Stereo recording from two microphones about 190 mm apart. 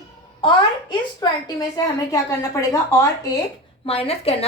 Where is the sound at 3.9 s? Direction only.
30° left (ahead or behind).